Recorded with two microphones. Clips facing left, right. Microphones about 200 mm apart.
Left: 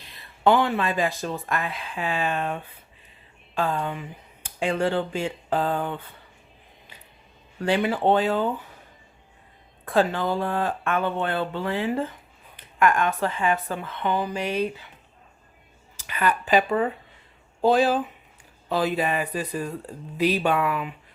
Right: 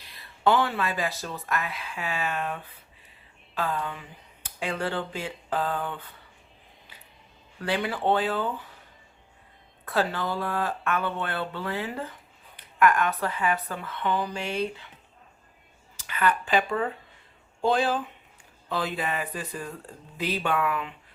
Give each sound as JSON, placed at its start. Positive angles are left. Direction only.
{"t": 0.0, "sound": "speech", "side_deg": 20}
{"t": 3.6, "sound": "speech", "side_deg": 30}
{"t": 8.0, "sound": "speech", "side_deg": 15}
{"t": 9.8, "sound": "speech", "side_deg": 20}
{"t": 16.0, "sound": "speech", "side_deg": 15}
{"t": 17.7, "sound": "speech", "side_deg": 10}